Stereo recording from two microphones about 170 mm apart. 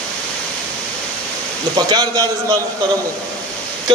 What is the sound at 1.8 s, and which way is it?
Speech, 25° right (ahead or behind).